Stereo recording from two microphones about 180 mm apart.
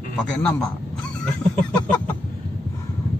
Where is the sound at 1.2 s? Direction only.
10° left (ahead or behind).